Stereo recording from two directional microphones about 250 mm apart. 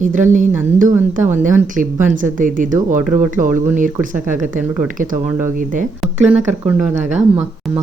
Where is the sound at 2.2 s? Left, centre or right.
Right.